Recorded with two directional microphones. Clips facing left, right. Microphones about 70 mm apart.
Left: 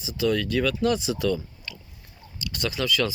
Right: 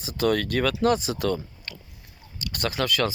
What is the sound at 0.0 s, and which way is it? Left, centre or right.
Speech, right.